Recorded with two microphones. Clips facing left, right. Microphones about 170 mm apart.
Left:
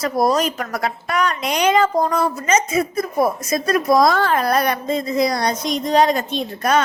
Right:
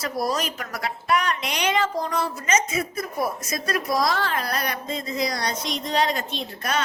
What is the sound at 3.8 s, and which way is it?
A woman's voice, 50° left (ahead or behind).